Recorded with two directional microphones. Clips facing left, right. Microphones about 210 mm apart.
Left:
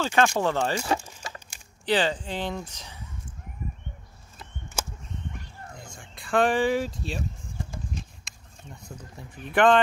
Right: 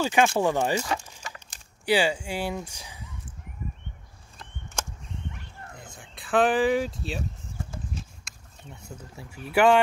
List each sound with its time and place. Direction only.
0.0 s speech: 10° right (ahead or behind)
0.8 s speech: 35° left (ahead or behind)
1.9 s speech: 10° right (ahead or behind)
5.8 s speech: 5° right (ahead or behind)
8.8 s speech: 5° right (ahead or behind)